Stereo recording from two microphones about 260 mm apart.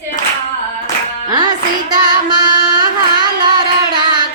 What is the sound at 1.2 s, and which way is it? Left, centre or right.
Music, centre.